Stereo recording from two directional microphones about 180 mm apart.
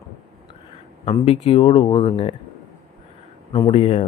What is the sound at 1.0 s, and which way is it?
Speech, 35° left (ahead or behind).